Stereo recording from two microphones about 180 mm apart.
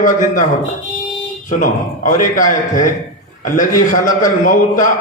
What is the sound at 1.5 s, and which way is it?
A man's voice, 45° left (ahead or behind).